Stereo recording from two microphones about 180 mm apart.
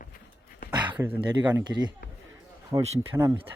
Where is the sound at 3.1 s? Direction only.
15° right (ahead or behind).